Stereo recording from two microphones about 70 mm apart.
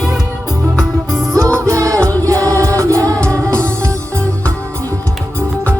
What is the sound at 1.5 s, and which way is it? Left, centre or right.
Music, right.